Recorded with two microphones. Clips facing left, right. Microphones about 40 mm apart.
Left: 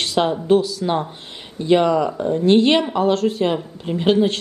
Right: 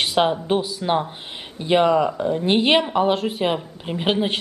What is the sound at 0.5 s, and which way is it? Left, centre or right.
Speech, centre.